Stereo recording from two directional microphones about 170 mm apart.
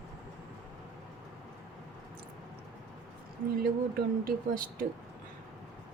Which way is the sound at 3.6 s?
60° right (ahead or behind).